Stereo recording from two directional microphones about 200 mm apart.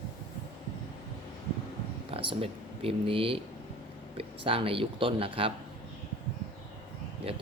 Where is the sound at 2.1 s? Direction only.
30° right (ahead or behind).